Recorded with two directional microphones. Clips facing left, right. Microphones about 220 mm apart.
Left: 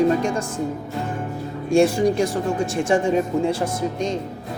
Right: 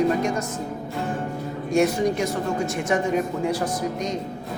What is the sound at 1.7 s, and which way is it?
Speech, 30° left (ahead or behind).